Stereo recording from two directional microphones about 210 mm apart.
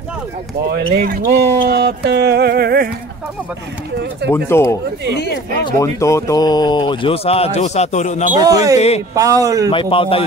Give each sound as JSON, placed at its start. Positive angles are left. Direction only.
{"t": 0.7, "sound": "speech", "side_deg": -45}
{"t": 4.3, "sound": "speech", "side_deg": 10}
{"t": 5.1, "sound": "speech", "side_deg": 55}
{"t": 5.7, "sound": "speech", "side_deg": 15}
{"t": 8.3, "sound": "speech", "side_deg": -15}
{"t": 8.7, "sound": "speech", "side_deg": 30}
{"t": 9.1, "sound": "speech", "side_deg": -15}
{"t": 9.7, "sound": "speech", "side_deg": 25}